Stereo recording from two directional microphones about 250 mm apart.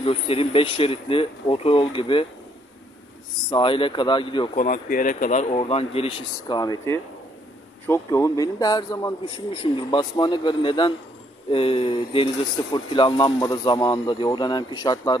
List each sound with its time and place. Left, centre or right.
0.0 s speech: left
3.4 s speech: centre
4.6 s a man's voice: left; by 15.1 s centre